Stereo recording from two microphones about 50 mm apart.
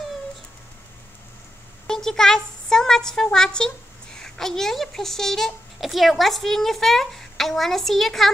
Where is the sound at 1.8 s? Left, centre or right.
Centre.